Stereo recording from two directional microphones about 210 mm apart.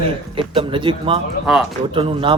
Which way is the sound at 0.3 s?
25° right (ahead or behind).